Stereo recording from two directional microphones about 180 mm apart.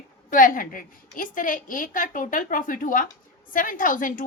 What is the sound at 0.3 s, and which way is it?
A woman's voice, 50° left (ahead or behind).